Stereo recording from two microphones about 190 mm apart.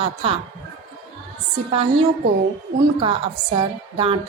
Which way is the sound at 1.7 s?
30° right (ahead or behind).